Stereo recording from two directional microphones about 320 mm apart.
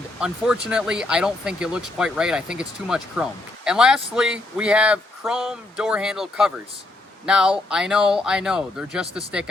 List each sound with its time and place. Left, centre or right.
0.2 s speech: centre